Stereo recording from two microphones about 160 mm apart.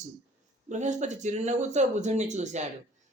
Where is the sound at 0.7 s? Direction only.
50° right (ahead or behind).